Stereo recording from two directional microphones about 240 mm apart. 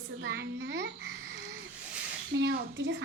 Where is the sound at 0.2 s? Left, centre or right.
Right.